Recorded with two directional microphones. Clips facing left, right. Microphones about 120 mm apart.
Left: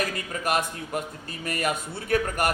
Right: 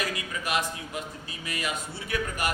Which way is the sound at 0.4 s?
50° left (ahead or behind).